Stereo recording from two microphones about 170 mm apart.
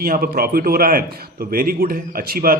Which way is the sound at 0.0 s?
60° right (ahead or behind).